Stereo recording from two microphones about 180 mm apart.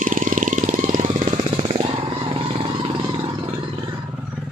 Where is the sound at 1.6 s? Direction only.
30° right (ahead or behind).